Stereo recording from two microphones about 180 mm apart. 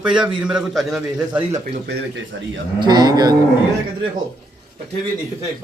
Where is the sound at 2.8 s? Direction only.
25° right (ahead or behind).